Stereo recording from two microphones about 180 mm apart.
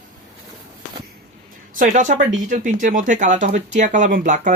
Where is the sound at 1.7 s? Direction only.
45° right (ahead or behind).